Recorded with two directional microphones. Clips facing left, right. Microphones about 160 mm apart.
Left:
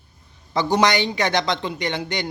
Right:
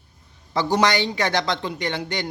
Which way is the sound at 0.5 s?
15° left (ahead or behind).